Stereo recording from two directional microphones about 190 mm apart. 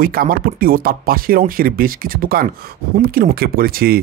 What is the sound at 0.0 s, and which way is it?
Speech, 50° right (ahead or behind).